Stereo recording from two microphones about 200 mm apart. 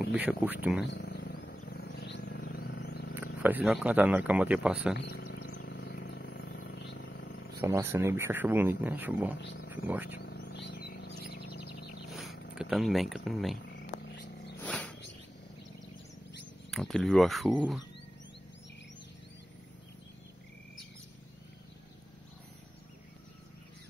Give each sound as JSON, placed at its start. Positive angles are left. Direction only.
{"t": 0.1, "sound": "speech", "side_deg": -5}
{"t": 0.8, "sound": "wild animals", "side_deg": 55}
{"t": 3.4, "sound": "speech", "side_deg": -5}
{"t": 4.9, "sound": "a sound", "side_deg": 55}
{"t": 7.6, "sound": "speech", "side_deg": -15}
{"t": 9.4, "sound": "speech", "side_deg": 65}
{"t": 9.7, "sound": "speech", "side_deg": -10}
{"t": 10.2, "sound": "chirp", "side_deg": 55}
{"t": 12.1, "sound": "a sound", "side_deg": 0}
{"t": 12.5, "sound": "speech", "side_deg": 0}
{"t": 13.7, "sound": "a sound", "side_deg": 65}
{"t": 14.6, "sound": "a sound", "side_deg": 5}
{"t": 16.7, "sound": "speech", "side_deg": 0}